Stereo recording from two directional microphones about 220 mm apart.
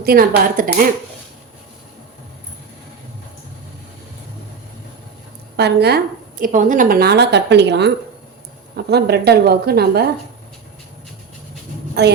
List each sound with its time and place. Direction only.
0.0 s speech: 40° right (ahead or behind)
5.5 s a woman's voice: 50° right (ahead or behind)
6.4 s a woman's voice: 35° right (ahead or behind)
12.0 s a woman's voice: 50° right (ahead or behind)